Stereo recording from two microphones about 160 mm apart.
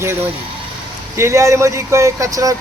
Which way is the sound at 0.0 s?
15° right (ahead or behind).